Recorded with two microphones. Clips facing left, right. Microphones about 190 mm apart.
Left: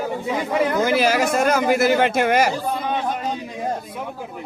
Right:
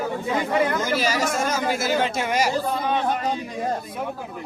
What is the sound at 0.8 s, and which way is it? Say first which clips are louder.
Speech: left 5 dB; 55° left (ahead or behind).